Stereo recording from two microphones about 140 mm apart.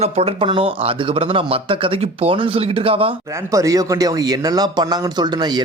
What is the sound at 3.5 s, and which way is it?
Speech, 25° right (ahead or behind).